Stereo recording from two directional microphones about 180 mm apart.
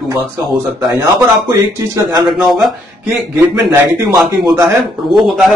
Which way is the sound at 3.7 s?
20° right (ahead or behind).